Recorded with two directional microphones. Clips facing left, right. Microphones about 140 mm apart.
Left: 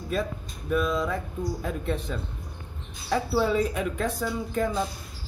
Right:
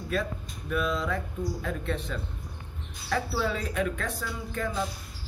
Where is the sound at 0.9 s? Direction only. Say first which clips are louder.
Left 3 dB; 15° left (ahead or behind).